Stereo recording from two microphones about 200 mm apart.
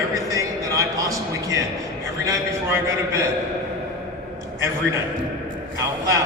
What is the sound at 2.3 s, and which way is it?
Speech, 15° right (ahead or behind).